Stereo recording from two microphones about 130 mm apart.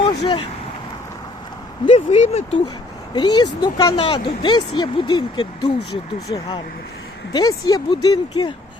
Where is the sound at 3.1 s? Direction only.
35° left (ahead or behind).